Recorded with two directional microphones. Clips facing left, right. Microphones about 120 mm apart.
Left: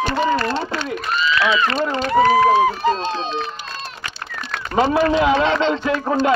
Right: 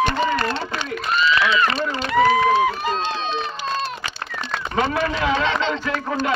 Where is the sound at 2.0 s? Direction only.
40° left (ahead or behind).